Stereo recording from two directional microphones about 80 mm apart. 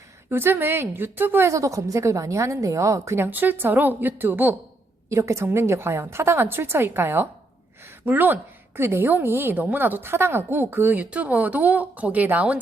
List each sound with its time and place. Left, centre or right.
0.3 s a woman's voice: right
1.5 s a woman's voice: right
3.2 s a woman's voice: right
5.0 s a woman's voice: right